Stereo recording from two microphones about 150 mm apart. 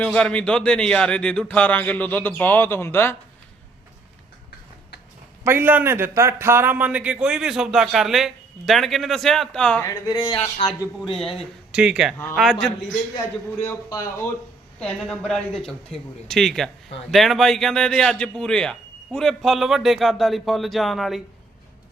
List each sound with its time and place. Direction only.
0.0 s speech: 5° left (ahead or behind)
5.5 s a man's voice: 15° right (ahead or behind); by 9.8 s 5° left (ahead or behind)
9.8 s speech: 25° left (ahead or behind)
10.6 s a man's voice: 40° left (ahead or behind)
11.7 s a man's voice: 5° right (ahead or behind)
13.7 s a man's voice: 15° left (ahead or behind)